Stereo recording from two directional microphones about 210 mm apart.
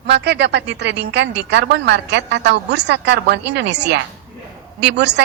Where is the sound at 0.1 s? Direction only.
55° right (ahead or behind).